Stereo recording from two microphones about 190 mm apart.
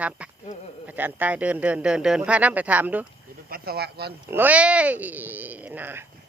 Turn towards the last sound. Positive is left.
turn(degrees=-10)  # may be behind; listen again after turning